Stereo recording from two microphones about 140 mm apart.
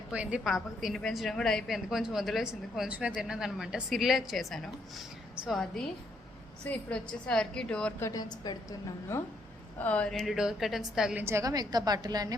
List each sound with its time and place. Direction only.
0.1 s a woman's voice: 10° right (ahead or behind); by 7.9 s 5° left (ahead or behind)
8.0 s a woman's voice: 25° left (ahead or behind)
9.7 s a woman's voice: 10° left (ahead or behind)
11.2 s a woman's voice: 20° right (ahead or behind)